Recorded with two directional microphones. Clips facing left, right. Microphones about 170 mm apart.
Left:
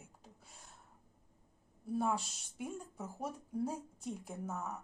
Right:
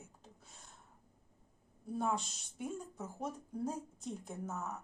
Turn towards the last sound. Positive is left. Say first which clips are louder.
# even
turn(degrees=10)  # may be behind; listen again after turning